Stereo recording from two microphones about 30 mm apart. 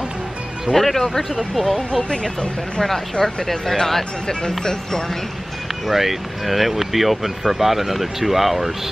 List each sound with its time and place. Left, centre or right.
0.7 s speech: centre
1.5 s speech: centre
3.2 s speech: left
5.9 s speech: centre